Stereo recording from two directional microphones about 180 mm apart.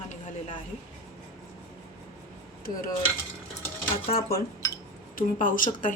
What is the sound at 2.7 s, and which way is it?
Speech, 50° left (ahead or behind).